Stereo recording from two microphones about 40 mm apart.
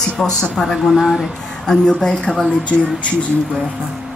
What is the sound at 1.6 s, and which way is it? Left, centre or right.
Speech, centre.